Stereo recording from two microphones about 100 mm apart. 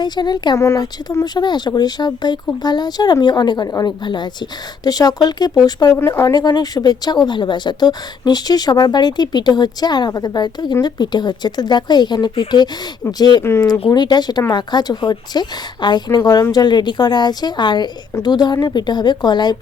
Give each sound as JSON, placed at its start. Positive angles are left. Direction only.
{"t": 0.0, "sound": "a woman's voice", "side_deg": 45}
{"t": 0.5, "sound": "speech", "side_deg": 30}
{"t": 1.2, "sound": "a woman's voice", "side_deg": 45}
{"t": 6.0, "sound": "a woman's voice", "side_deg": 30}
{"t": 13.4, "sound": "speech", "side_deg": 25}
{"t": 13.9, "sound": "a woman's voice", "side_deg": 45}